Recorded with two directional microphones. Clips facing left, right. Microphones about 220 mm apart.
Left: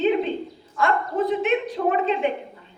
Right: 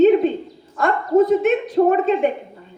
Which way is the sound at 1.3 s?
45° right (ahead or behind).